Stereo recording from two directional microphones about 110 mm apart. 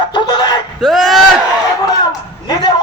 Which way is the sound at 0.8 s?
Centre (ahead or behind).